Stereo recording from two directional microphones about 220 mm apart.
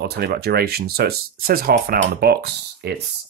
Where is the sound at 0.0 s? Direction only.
45° right (ahead or behind).